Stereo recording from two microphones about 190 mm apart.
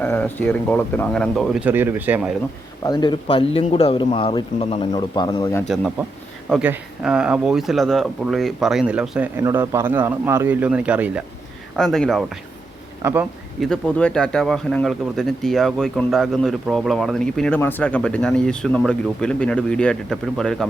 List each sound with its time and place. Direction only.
0.0 s speech: 10° left (ahead or behind)
1.6 s speech: 10° right (ahead or behind)
2.8 s a man's voice: 25° left (ahead or behind)
5.6 s speech: centre (ahead or behind)
13.0 s speech: 15° right (ahead or behind)
13.6 s speech: 5° left (ahead or behind)